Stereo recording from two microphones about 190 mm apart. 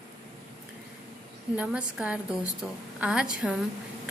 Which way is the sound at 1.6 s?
5° right (ahead or behind).